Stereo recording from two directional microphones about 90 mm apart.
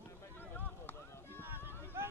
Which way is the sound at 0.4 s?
20° left (ahead or behind).